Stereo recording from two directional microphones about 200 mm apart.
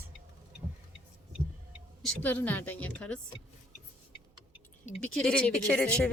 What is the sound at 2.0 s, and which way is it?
A woman's voice, 10° left (ahead or behind).